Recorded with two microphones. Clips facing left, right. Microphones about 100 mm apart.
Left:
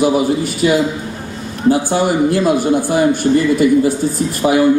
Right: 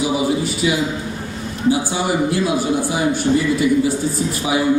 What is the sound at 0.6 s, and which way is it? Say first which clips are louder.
A man's voice: left 9 dB; 60° left (ahead or behind).